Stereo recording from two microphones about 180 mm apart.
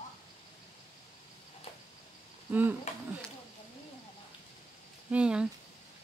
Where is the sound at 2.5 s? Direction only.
10° right (ahead or behind).